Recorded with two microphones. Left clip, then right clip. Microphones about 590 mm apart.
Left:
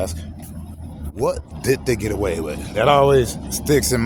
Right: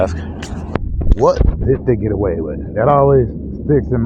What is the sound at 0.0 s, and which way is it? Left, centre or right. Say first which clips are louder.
Speech: right 9 dB; left.